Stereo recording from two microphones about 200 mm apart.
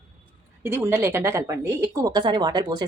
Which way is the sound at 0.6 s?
10° right (ahead or behind).